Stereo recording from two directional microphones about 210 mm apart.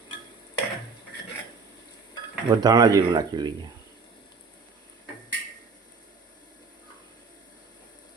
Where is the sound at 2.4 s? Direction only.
20° right (ahead or behind).